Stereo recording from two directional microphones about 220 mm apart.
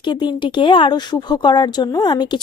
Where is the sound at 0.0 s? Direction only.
20° left (ahead or behind).